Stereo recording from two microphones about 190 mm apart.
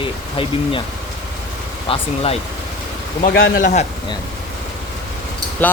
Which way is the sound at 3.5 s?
40° left (ahead or behind).